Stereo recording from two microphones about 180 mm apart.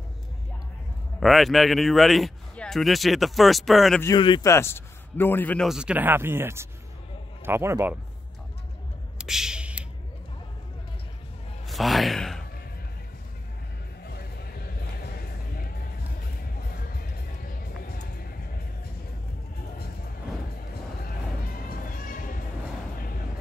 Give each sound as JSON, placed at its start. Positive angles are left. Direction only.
{"t": 1.2, "sound": "speech", "side_deg": 0}
{"t": 4.0, "sound": "a man's voice", "side_deg": 25}
{"t": 5.7, "sound": "speech", "side_deg": -5}
{"t": 9.2, "sound": "a sound", "side_deg": -5}
{"t": 11.6, "sound": "speech", "side_deg": 0}
{"t": 14.0, "sound": "music", "side_deg": 60}
{"t": 17.5, "sound": "music", "side_deg": 55}